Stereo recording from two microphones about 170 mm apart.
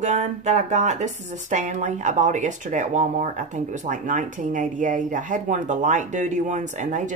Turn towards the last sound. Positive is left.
turn(degrees=-45)  # may be behind; listen again after turning